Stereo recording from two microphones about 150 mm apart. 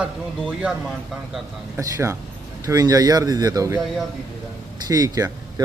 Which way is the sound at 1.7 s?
20° right (ahead or behind).